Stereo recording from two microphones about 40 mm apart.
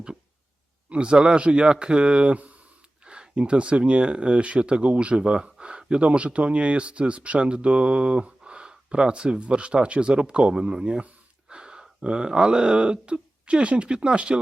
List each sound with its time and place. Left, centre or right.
0.9 s speech: right
11.4 s gasp: right
12.0 s speech: right